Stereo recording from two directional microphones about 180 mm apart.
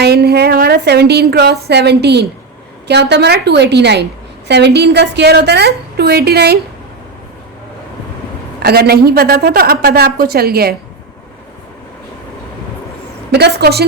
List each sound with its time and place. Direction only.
0.0 s a woman's voice: 65° right (ahead or behind)
8.6 s a woman's voice: 60° right (ahead or behind)
13.3 s a woman's voice: 65° right (ahead or behind)